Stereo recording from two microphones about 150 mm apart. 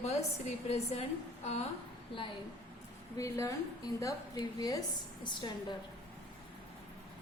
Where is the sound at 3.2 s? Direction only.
20° left (ahead or behind).